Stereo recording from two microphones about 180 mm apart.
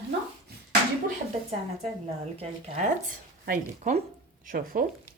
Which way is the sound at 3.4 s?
55° right (ahead or behind).